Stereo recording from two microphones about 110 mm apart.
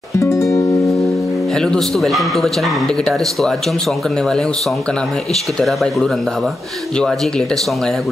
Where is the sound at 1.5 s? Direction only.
5° left (ahead or behind).